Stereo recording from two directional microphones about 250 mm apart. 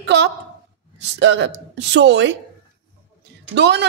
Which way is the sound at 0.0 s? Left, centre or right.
Right.